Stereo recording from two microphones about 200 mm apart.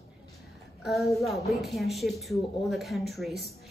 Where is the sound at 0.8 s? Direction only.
Centre (ahead or behind).